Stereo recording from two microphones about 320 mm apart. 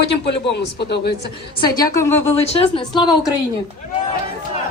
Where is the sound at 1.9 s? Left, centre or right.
Centre.